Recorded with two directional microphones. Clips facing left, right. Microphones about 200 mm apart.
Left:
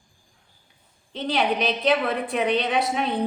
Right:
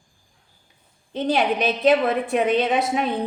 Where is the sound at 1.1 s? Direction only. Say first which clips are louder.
Right 3 dB; 45° right (ahead or behind).